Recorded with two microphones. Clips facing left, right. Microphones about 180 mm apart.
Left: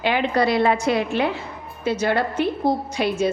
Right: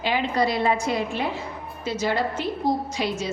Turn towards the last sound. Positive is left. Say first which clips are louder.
# left 6 dB
turn(degrees=60)  # may be behind; listen again after turning